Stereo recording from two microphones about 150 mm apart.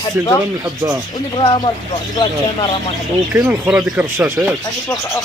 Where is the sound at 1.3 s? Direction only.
35° left (ahead or behind).